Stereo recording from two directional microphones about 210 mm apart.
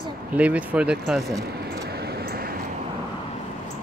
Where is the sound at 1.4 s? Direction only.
50° right (ahead or behind).